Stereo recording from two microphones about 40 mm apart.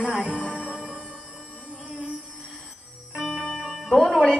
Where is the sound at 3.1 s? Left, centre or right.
Centre.